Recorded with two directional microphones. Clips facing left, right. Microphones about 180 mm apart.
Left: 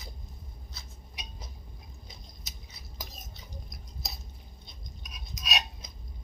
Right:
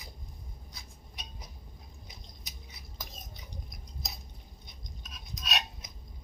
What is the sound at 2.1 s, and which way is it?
Biting, 15° right (ahead or behind).